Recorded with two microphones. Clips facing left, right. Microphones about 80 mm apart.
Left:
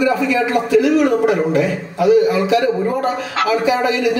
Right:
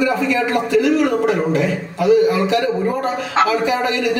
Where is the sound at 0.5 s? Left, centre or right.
Centre.